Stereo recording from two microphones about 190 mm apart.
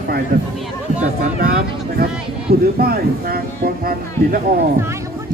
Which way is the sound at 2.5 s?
50° right (ahead or behind).